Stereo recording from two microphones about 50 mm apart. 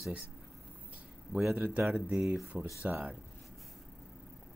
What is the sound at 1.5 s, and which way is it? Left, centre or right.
Speech, right.